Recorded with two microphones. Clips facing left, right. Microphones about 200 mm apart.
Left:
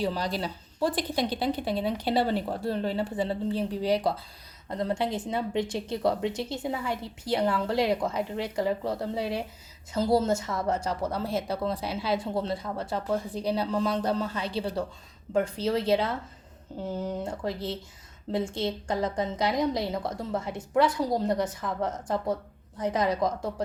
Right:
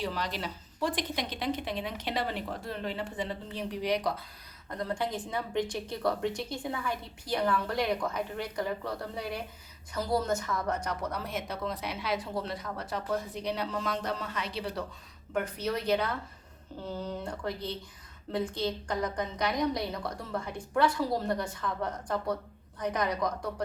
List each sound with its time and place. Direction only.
0.0 s a woman's voice: 35° left (ahead or behind)